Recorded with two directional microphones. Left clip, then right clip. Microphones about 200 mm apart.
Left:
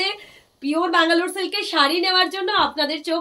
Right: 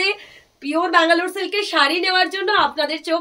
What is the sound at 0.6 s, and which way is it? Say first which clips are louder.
A woman's voice: right 2 dB; 20° right (ahead or behind).